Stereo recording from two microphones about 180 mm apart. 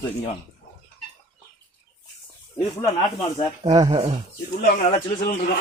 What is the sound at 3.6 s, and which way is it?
Speech, 25° right (ahead or behind).